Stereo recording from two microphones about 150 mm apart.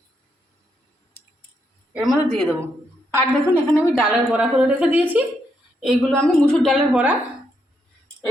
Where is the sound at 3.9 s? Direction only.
5° right (ahead or behind).